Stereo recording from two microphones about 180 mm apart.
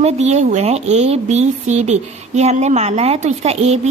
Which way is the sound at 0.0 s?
40° right (ahead or behind).